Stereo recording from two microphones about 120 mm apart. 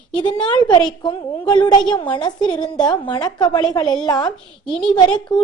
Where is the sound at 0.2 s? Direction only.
40° left (ahead or behind).